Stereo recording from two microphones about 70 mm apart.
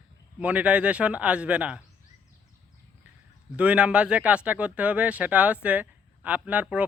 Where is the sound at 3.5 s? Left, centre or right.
Centre.